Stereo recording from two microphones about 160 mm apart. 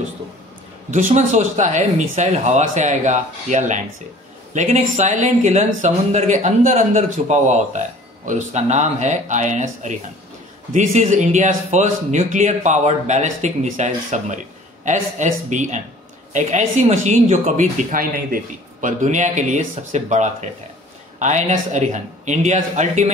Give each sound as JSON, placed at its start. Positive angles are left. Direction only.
{"t": 0.8, "sound": "speech", "side_deg": -45}